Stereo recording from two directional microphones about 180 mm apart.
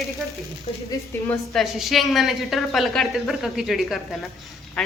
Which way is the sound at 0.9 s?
20° left (ahead or behind).